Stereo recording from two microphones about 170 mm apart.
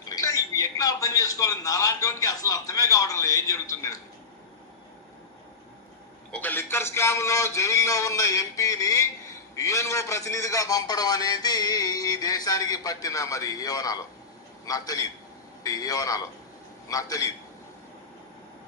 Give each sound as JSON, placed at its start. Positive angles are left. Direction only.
{"t": 0.0, "sound": "a man's voice", "side_deg": 20}
{"t": 6.3, "sound": "a man's voice", "side_deg": 10}